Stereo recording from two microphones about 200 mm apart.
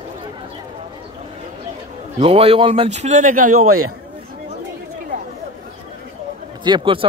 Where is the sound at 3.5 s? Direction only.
90° right.